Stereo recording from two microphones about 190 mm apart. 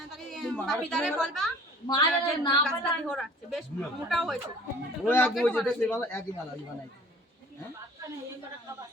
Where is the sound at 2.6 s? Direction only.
Centre (ahead or behind); by 6.2 s 15° left (ahead or behind).